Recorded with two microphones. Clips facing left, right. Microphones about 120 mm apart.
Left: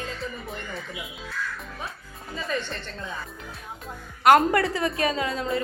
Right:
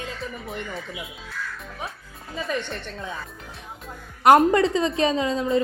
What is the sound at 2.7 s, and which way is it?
Speech, 15° right (ahead or behind).